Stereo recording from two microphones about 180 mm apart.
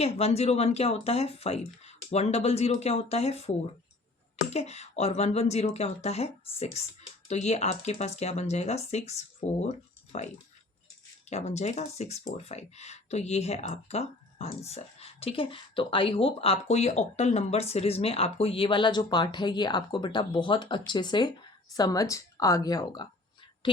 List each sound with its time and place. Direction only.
0.0 s speech: 35° left (ahead or behind)
4.5 s speech: 35° left (ahead or behind)
11.3 s speech: 40° left (ahead or behind); by 23.0 s 20° left (ahead or behind)